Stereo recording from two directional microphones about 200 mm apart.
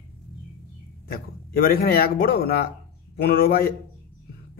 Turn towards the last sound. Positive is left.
turn(degrees=50)  # may be behind; listen again after turning